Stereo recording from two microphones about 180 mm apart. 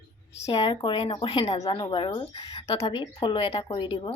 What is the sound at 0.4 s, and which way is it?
Speech, 25° left (ahead or behind).